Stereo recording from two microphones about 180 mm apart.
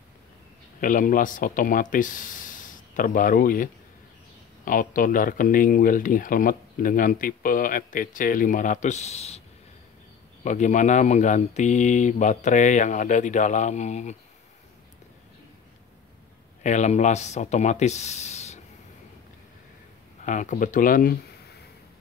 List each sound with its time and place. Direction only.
0.7 s speech: 50° left (ahead or behind)
10.4 s speech: 40° left (ahead or behind)
16.6 s speech: 40° left (ahead or behind)
20.2 s speech: 45° left (ahead or behind)